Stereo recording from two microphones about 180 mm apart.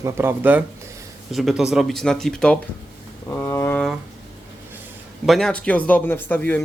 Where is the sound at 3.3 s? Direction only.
15° left (ahead or behind).